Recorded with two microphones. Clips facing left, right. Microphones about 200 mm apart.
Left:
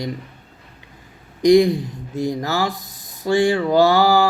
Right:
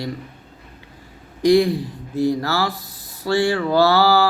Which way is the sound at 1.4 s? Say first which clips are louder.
Left 2 dB; 15° left (ahead or behind).